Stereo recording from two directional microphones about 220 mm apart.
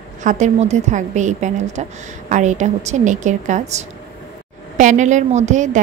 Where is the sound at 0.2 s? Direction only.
35° right (ahead or behind).